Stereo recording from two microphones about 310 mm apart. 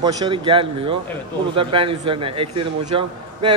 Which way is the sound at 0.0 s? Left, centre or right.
Centre.